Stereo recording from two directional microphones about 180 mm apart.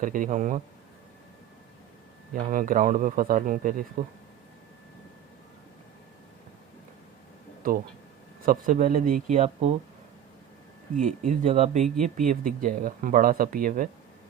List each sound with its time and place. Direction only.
0.0 s speech: 50° right (ahead or behind)
2.3 s speech: 50° right (ahead or behind)
7.6 s speech: 55° right (ahead or behind); by 9.7 s 40° right (ahead or behind)
11.0 s speech: 40° right (ahead or behind)